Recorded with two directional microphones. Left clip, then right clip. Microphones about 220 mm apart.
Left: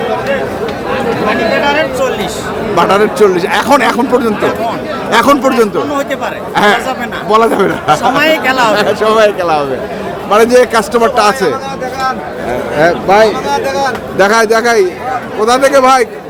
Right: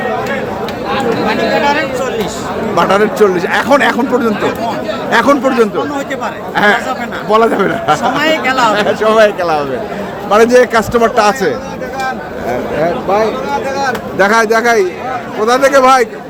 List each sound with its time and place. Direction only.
1.6 s chatter: 15° left (ahead or behind)
2.7 s a man's voice: centre (ahead or behind)
8.1 s speech: 20° left (ahead or behind)
8.7 s a man's voice: centre (ahead or behind)
12.8 s speech: 25° left (ahead or behind)
14.2 s a man's voice: centre (ahead or behind)